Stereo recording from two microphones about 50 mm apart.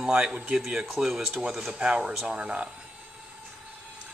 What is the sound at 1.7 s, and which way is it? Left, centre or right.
Speech, centre.